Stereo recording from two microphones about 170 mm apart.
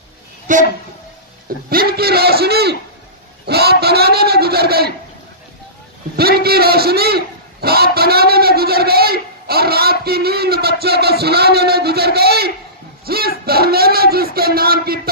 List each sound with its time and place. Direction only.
0.5 s speech: 45° right (ahead or behind)
1.7 s a man's voice: 60° right (ahead or behind)
6.1 s a man's voice: 65° right (ahead or behind)